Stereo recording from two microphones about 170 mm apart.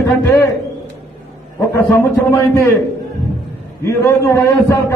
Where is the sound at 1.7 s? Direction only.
20° left (ahead or behind).